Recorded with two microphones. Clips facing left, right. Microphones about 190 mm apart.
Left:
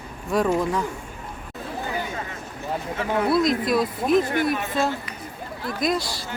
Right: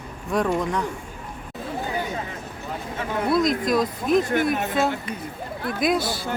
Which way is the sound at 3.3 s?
Centre (ahead or behind).